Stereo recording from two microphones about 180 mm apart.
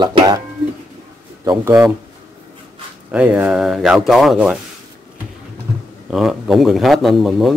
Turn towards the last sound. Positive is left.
turn(degrees=0)  # may be behind; listen again after turning